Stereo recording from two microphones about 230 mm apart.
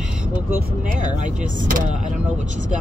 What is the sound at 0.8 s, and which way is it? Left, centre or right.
Speech, right.